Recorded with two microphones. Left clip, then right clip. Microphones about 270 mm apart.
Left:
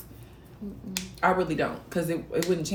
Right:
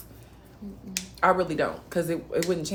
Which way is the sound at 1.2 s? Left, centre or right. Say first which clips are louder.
Right 2 dB; centre.